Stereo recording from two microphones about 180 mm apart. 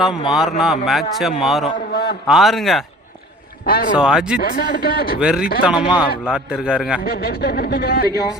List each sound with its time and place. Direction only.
0.3 s a man's voice: centre (ahead or behind)
3.7 s speech: 55° left (ahead or behind)
3.9 s a man's voice: 5° right (ahead or behind)
4.4 s speech: 60° left (ahead or behind)
5.2 s a man's voice: 5° right (ahead or behind)
7.0 s speech: 60° left (ahead or behind)